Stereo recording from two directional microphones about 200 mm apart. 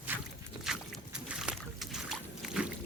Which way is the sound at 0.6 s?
5° right (ahead or behind).